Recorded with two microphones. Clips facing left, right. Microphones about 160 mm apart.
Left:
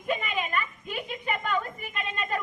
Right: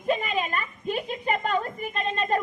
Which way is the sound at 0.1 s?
35° right (ahead or behind).